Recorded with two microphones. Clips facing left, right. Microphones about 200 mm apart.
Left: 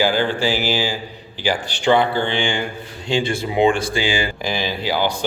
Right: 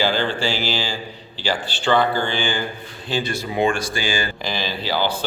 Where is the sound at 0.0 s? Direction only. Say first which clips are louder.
Left 3 dB; 10° left (ahead or behind).